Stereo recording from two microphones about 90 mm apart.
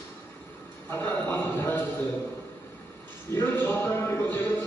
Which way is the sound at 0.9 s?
20° left (ahead or behind).